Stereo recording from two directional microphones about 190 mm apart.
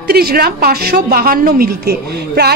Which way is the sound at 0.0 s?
55° right (ahead or behind).